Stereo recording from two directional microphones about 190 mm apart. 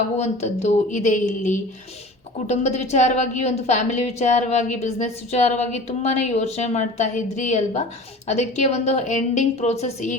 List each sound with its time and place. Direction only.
0.2 s a woman's voice: 35° left (ahead or behind)